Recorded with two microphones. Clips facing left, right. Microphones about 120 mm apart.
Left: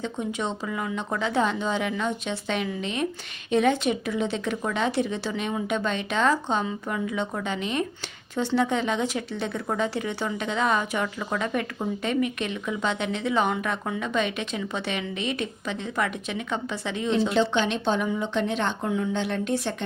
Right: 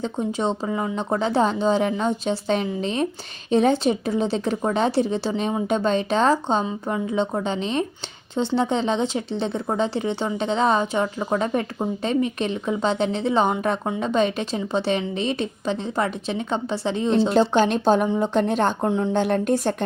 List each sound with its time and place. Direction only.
0.0 s a woman's voice: 35° right (ahead or behind)
18.9 s speech: 30° right (ahead or behind)
19.1 s a woman's voice: 45° right (ahead or behind)